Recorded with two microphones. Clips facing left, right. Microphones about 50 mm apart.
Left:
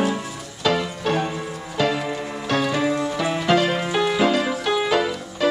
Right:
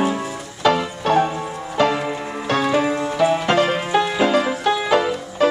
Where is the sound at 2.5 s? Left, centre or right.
Centre.